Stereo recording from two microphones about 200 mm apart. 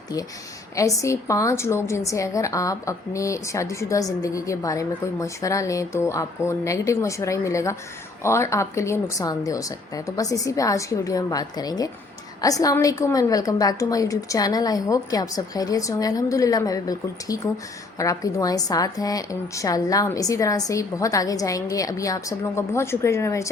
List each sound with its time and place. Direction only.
0.8 s a woman's voice: 15° left (ahead or behind)